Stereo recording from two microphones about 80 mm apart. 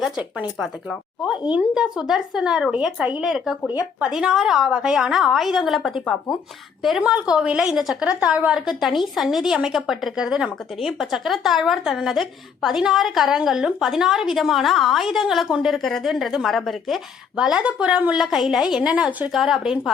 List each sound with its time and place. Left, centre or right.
0.6 s a woman's voice: centre
1.5 s a woman's voice: centre
7.0 s a woman's voice: centre
17.3 s a woman's voice: centre